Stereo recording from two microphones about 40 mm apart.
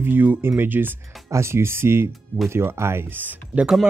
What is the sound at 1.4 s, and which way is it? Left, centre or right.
Speech, right.